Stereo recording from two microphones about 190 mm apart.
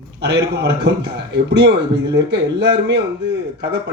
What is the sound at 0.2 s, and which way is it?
Speech, 65° right (ahead or behind).